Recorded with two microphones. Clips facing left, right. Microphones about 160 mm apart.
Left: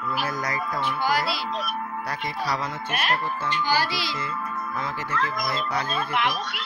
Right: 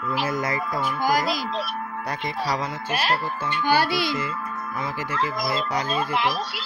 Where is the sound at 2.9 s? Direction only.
30° right (ahead or behind).